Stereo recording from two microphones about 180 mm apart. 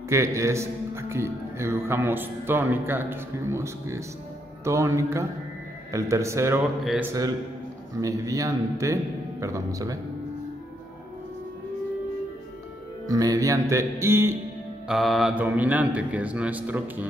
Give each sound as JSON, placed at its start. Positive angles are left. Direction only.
{"t": 0.1, "sound": "a man's voice", "side_deg": -15}
{"t": 13.0, "sound": "a man's voice", "side_deg": -20}
{"t": 14.9, "sound": "a man's voice", "side_deg": 0}